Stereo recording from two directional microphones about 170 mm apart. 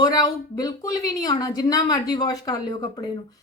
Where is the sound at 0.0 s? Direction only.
20° left (ahead or behind).